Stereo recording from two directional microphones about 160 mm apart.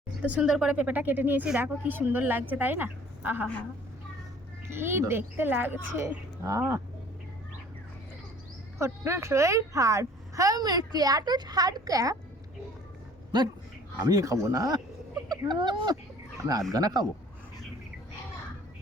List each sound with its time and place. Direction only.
0.2 s speech: 10° right (ahead or behind)
3.4 s a woman's voice: 10° left (ahead or behind)
4.7 s speech: 15° right (ahead or behind)
8.8 s a woman's voice: 15° right (ahead or behind)
13.3 s a woman's voice: 25° right (ahead or behind)